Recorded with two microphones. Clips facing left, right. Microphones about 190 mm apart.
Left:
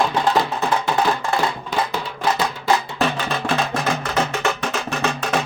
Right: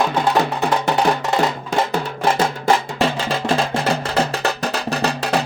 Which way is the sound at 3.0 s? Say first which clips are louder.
Right 2 dB; 30° right (ahead or behind).